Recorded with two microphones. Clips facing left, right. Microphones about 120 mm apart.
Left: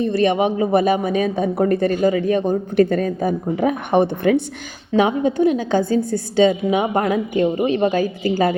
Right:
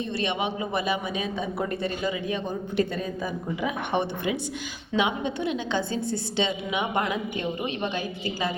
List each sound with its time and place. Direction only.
0.0 s speech: 45° left (ahead or behind)